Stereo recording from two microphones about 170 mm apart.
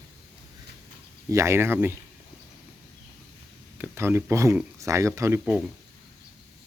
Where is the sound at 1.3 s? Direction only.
15° right (ahead or behind).